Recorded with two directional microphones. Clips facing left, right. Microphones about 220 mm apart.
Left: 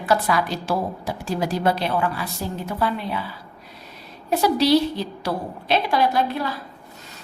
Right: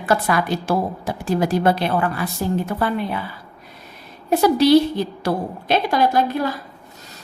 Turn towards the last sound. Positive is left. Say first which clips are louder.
# right 3 dB
turn(degrees=-45)  # may be behind; listen again after turning